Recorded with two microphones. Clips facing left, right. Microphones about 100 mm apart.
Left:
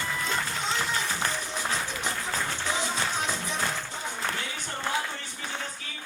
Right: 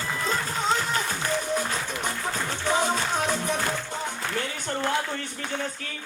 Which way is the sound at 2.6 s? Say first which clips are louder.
Right 9 dB; 50° right (ahead or behind).